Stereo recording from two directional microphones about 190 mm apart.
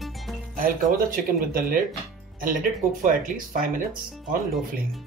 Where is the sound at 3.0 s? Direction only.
45° right (ahead or behind).